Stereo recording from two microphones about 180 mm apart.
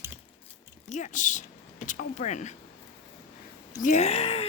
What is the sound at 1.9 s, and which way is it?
Speech, 45° left (ahead or behind).